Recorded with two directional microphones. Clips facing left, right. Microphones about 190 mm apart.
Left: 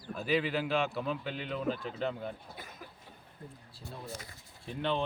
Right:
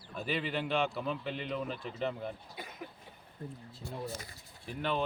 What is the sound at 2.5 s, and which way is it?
Speech, 55° left (ahead or behind).